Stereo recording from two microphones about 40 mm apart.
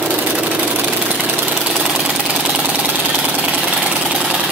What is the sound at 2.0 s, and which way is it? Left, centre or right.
Engine, right.